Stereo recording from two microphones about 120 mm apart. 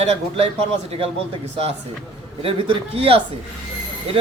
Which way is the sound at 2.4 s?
50° right (ahead or behind).